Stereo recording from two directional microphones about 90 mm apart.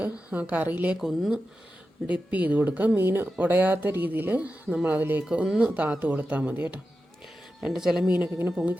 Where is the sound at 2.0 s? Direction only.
15° right (ahead or behind).